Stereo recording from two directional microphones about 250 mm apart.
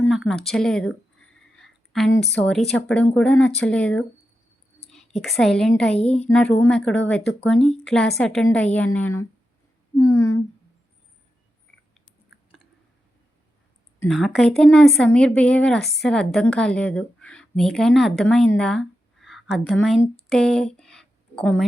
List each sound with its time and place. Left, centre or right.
0.0 s a woman's voice: centre
5.2 s speech: centre
14.0 s speech: centre
20.7 s a sound: centre